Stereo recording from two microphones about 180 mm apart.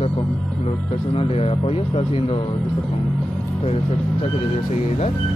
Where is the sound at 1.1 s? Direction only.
35° left (ahead or behind).